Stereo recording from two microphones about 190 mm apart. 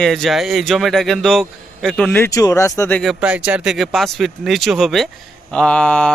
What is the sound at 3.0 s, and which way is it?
Speech, 5° right (ahead or behind).